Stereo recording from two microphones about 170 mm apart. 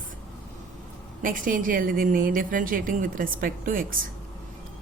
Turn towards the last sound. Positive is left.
turn(degrees=-55)  # may be behind; listen again after turning